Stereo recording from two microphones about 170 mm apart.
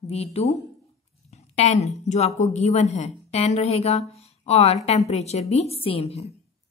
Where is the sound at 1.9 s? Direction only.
40° left (ahead or behind).